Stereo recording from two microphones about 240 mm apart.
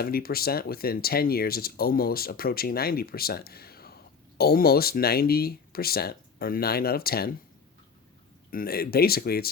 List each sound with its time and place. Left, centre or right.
0.0 s speech: left
8.4 s speech: left